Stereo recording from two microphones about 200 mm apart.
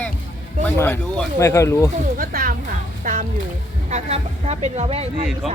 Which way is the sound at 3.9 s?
30° right (ahead or behind).